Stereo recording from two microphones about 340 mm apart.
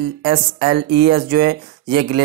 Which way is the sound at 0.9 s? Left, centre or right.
Right.